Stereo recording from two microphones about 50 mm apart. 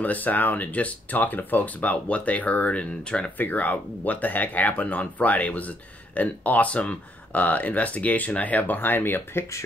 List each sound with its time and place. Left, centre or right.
0.0 s speech: left
3.3 s speech: left